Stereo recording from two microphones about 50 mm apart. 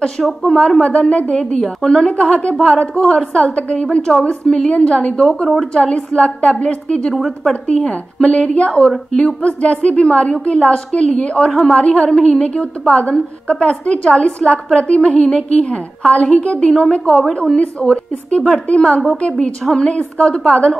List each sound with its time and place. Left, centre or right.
0.5 s a woman's voice: centre
5.2 s a woman's voice: centre
5.8 s a woman's voice: centre
7.2 s a woman's voice: centre
7.8 s a woman's voice: left
19.9 s a woman's voice: left